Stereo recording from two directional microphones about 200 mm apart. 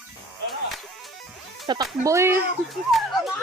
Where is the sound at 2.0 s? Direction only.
15° right (ahead or behind).